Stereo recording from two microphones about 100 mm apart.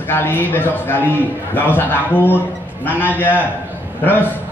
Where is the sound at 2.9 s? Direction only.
20° left (ahead or behind).